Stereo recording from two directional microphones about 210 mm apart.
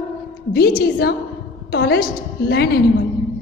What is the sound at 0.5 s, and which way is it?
A woman's voice, 50° left (ahead or behind).